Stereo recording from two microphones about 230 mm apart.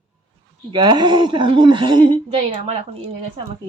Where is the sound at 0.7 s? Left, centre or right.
Centre.